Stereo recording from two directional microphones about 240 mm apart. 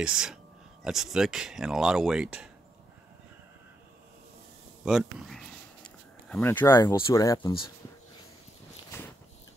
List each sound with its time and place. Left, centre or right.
0.0 s speech: centre
4.8 s speech: centre; by 7.7 s left
8.9 s walk: centre